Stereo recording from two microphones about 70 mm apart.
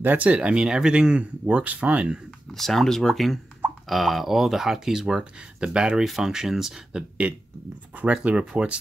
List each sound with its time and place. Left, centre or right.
0.0 s speech: right
2.5 s speech: centre